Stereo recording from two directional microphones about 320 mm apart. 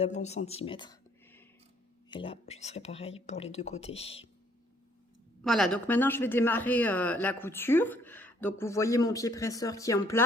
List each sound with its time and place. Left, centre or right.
0.0 s speech: left
5.4 s speech: centre